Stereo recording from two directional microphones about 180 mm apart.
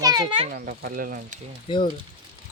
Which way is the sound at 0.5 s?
60° right (ahead or behind).